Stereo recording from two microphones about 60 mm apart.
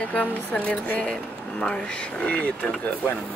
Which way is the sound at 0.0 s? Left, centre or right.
Left.